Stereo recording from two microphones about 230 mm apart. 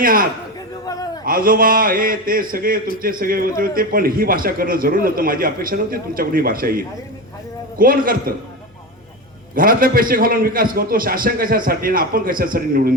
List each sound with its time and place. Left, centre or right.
0.0 s a man's voice: right
9.6 s a man's voice: right